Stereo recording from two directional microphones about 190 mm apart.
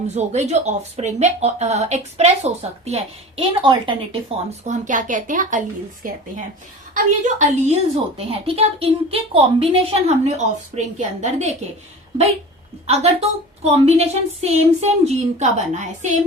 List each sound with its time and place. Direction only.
0.1 s speech: 35° right (ahead or behind)
4.6 s speech: 40° right (ahead or behind)
12.9 s speech: 35° right (ahead or behind)